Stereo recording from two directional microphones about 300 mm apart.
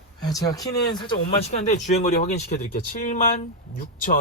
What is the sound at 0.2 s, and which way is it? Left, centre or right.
Speech, centre.